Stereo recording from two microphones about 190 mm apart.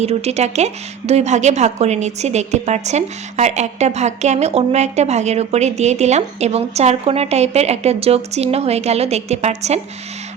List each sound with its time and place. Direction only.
0.0 s speech: 35° right (ahead or behind)